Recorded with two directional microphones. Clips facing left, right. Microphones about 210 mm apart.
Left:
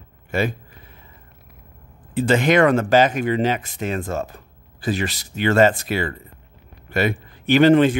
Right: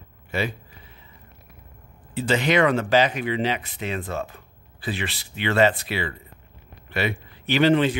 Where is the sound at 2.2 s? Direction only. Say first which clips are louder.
Left 4 dB; 50° left (ahead or behind).